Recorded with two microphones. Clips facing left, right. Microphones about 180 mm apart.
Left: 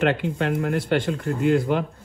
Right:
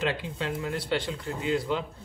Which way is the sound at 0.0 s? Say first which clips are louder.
Left 8 dB; 60° left (ahead or behind).